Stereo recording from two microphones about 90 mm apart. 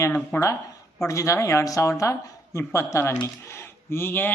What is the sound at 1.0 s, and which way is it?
Speech, 35° left (ahead or behind).